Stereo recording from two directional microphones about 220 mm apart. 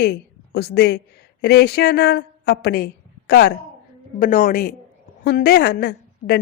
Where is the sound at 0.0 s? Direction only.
45° left (ahead or behind).